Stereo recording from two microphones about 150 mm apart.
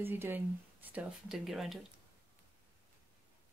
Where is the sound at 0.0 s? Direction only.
15° right (ahead or behind).